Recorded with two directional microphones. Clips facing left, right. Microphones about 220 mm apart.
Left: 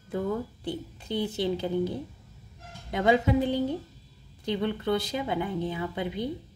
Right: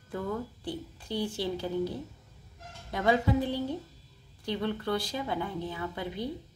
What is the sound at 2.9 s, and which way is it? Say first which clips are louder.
A woman's voice: left 3 dB; 20° left (ahead or behind).